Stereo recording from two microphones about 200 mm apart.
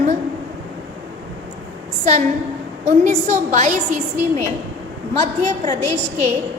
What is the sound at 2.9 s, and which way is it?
A woman's voice, 35° right (ahead or behind).